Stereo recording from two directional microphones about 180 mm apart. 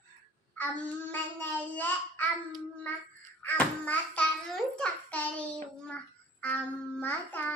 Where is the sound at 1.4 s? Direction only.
10° left (ahead or behind).